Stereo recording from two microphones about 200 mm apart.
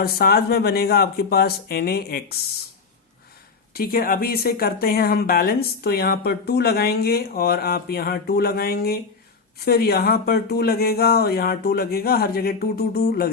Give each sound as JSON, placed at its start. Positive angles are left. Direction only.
{"t": 0.0, "sound": "speech", "side_deg": 50}
{"t": 3.8, "sound": "speech", "side_deg": 45}